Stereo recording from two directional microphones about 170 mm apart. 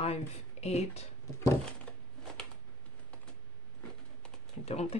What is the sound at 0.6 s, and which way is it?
Speech, 40° left (ahead or behind).